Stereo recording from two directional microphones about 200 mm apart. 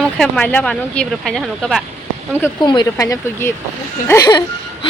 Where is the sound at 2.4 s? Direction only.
20° left (ahead or behind).